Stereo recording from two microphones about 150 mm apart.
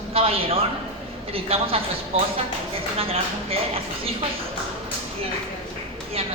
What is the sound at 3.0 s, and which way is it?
Speech, 40° right (ahead or behind).